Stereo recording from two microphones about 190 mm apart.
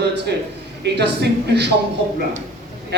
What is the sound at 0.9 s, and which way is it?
Speech, 60° right (ahead or behind).